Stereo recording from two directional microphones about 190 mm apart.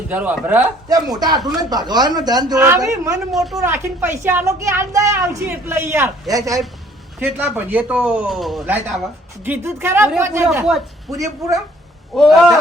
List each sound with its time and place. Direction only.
0.1 s a woman's voice: 10° right (ahead or behind)
0.9 s a woman's voice: 20° right (ahead or behind)
3.3 s speech: centre (ahead or behind)
3.6 s a woman's voice: 15° right (ahead or behind)
12.1 s speech: centre (ahead or behind)